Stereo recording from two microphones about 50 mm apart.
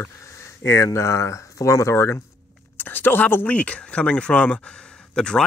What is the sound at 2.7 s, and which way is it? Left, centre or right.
Speech, left.